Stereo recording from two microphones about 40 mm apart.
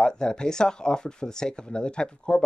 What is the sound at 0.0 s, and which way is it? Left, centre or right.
Speech, centre.